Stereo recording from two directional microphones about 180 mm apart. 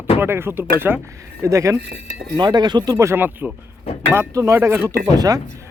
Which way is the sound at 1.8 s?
65° right (ahead or behind).